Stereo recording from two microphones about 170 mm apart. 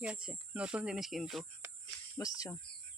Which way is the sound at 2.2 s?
20° left (ahead or behind).